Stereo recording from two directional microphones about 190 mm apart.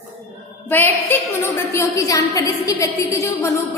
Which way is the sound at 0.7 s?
10° left (ahead or behind).